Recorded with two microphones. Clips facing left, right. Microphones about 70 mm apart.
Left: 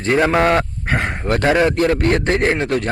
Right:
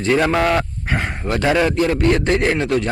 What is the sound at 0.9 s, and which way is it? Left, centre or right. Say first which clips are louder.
Speech: left 3 dB; left.